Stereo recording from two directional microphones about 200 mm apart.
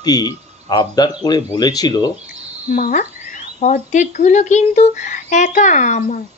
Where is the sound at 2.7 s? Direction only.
40° left (ahead or behind).